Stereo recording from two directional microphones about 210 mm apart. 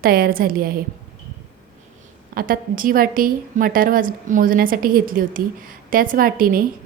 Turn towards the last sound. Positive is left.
turn(degrees=-40)  # may be behind; listen again after turning